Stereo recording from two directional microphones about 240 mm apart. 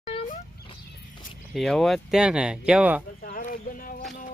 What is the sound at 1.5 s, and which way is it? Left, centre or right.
Speech, centre.